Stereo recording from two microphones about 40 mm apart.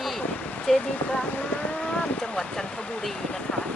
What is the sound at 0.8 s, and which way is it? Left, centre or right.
Speech, left.